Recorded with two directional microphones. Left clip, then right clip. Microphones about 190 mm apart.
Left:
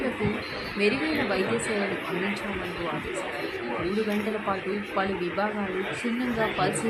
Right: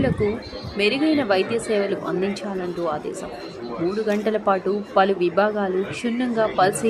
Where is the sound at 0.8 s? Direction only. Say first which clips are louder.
Right 6 dB; 40° right (ahead or behind).